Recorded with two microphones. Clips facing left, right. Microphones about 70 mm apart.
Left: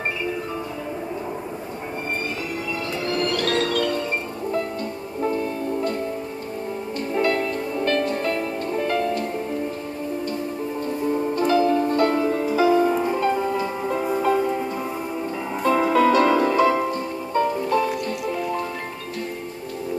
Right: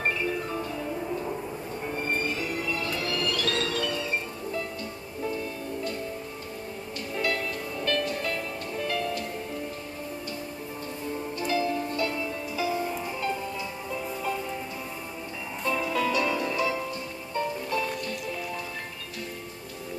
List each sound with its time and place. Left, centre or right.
3.1 s music: left
7.2 s music: left
11.3 s music: left